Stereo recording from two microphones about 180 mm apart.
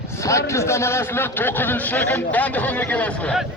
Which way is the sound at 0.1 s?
15° left (ahead or behind).